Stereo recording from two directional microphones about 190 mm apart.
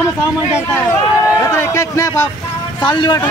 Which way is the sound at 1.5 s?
15° left (ahead or behind).